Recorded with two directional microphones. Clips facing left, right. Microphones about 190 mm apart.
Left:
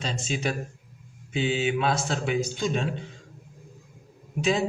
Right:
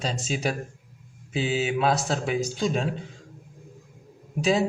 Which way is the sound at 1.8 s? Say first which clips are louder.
Right 2 dB; 40° right (ahead or behind).